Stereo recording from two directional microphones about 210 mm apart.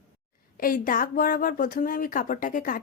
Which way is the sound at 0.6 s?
40° left (ahead or behind).